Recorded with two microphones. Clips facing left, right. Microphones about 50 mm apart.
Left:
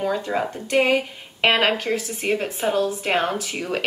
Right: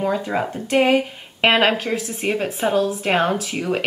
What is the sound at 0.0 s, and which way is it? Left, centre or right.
Speech, centre.